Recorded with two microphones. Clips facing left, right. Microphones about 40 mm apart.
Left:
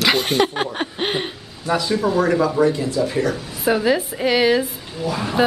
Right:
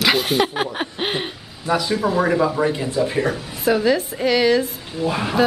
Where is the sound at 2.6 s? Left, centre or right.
Right.